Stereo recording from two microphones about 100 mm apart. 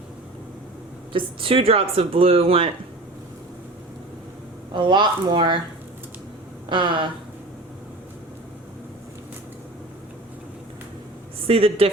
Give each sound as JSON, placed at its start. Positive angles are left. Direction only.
{"t": 1.1, "sound": "speech", "side_deg": -65}
{"t": 4.7, "sound": "speech", "side_deg": -55}
{"t": 6.7, "sound": "speech", "side_deg": -55}
{"t": 11.4, "sound": "speech", "side_deg": -70}